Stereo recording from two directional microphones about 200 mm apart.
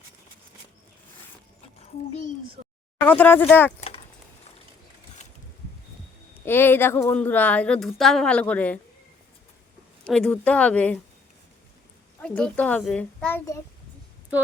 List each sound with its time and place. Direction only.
2.6 s a sound: 45° right (ahead or behind)
3.0 s speech: 10° left (ahead or behind)
3.8 s a sound: 30° left (ahead or behind)
6.4 s speech: 10° left (ahead or behind)
10.0 s speech: 5° left (ahead or behind)
12.2 s speech: 5° left (ahead or behind)